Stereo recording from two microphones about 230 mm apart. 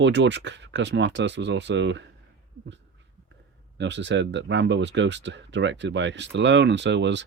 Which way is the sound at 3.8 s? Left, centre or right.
Right.